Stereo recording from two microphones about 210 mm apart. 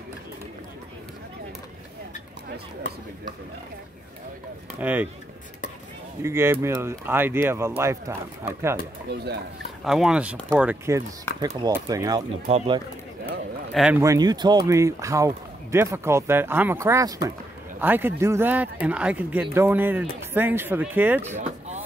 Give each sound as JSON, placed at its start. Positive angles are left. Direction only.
{"t": 4.7, "sound": "speech", "side_deg": -10}
{"t": 6.2, "sound": "speech", "side_deg": -10}
{"t": 9.1, "sound": "speech", "side_deg": -50}
{"t": 9.8, "sound": "speech", "side_deg": -5}
{"t": 12.4, "sound": "speech", "side_deg": -25}
{"t": 13.7, "sound": "speech", "side_deg": -5}
{"t": 14.0, "sound": "speech", "side_deg": -15}
{"t": 21.4, "sound": "a sound", "side_deg": -30}